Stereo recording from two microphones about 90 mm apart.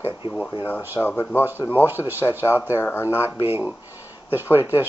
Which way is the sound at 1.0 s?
25° left (ahead or behind).